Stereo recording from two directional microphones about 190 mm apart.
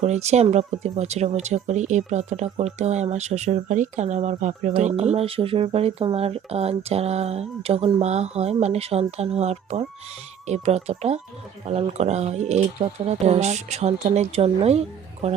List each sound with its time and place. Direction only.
0.0 s speech: 35° right (ahead or behind)